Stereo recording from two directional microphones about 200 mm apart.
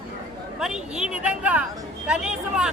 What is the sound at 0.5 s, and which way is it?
Speech, centre (ahead or behind).